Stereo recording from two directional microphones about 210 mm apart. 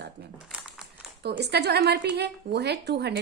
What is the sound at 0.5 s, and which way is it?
Crumpling, 5° right (ahead or behind).